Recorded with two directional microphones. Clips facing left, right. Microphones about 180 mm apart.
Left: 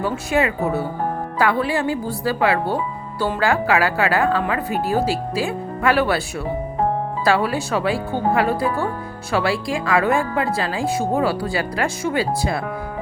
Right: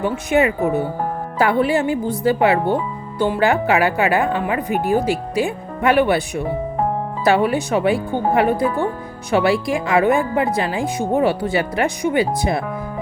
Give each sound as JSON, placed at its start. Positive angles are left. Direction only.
{"t": 0.0, "sound": "speech", "side_deg": -20}